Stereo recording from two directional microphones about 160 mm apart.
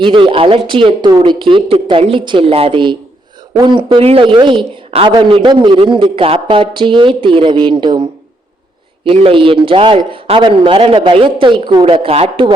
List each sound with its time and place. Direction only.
0.0 s speech: 30° right (ahead or behind)
9.0 s speech: 35° right (ahead or behind)